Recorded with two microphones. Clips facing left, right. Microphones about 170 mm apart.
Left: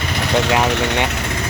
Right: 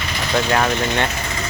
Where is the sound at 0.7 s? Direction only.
70° left (ahead or behind).